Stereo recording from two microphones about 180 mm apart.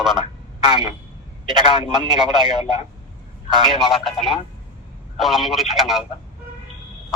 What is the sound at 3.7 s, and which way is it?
Speech, centre (ahead or behind).